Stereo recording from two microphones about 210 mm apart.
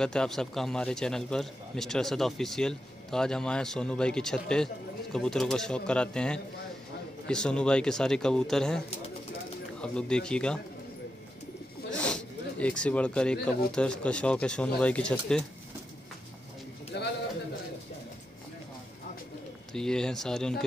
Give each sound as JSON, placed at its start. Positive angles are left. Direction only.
{"t": 0.0, "sound": "a man's voice", "side_deg": 5}
{"t": 11.9, "sound": "speech", "side_deg": 5}
{"t": 16.9, "sound": "bird", "side_deg": 55}
{"t": 19.7, "sound": "a man's voice", "side_deg": 5}